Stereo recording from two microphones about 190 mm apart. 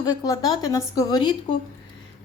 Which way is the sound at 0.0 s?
20° left (ahead or behind).